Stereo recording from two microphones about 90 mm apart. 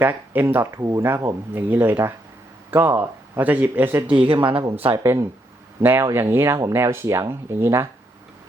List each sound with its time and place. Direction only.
0.0 s speech: 25° right (ahead or behind)
1.0 s speech: 25° right (ahead or behind)
4.1 s speech: 70° right (ahead or behind)
5.0 s speech: 30° right (ahead or behind)